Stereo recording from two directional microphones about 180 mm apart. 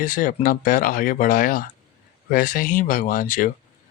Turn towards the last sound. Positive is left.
turn(degrees=50)  # may be behind; listen again after turning